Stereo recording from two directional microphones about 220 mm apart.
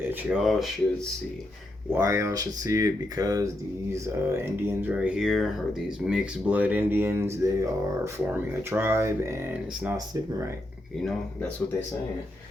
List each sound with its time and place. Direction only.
0.1 s speech: 5° right (ahead or behind)
1.9 s speech: 10° right (ahead or behind)